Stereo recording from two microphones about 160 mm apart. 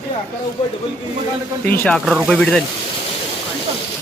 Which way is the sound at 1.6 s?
10° left (ahead or behind).